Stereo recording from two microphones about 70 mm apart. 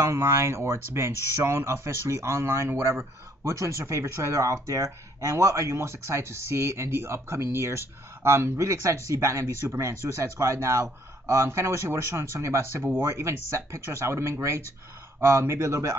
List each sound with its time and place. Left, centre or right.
0.0 s speech: right